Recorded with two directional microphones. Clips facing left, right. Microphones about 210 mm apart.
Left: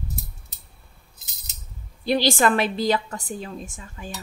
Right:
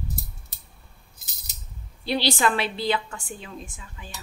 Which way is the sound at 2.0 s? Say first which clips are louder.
Left 3 dB; 45° left (ahead or behind).